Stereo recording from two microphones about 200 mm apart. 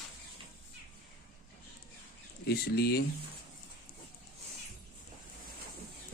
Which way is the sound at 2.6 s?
50° left (ahead or behind).